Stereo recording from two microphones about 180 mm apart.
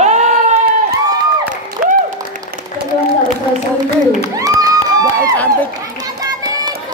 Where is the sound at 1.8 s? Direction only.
45° right (ahead or behind).